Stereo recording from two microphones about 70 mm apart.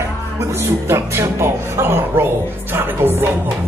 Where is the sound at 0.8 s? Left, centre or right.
Right.